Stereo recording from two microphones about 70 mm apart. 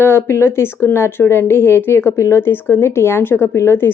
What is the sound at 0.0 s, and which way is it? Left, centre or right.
Speech, left.